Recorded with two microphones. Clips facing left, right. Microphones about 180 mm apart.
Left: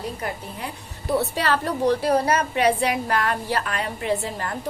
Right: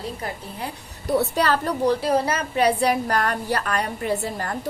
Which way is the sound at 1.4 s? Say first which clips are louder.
Right 1 dB; 40° right (ahead or behind).